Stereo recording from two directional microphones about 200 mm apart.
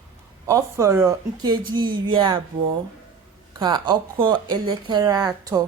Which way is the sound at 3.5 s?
20° right (ahead or behind).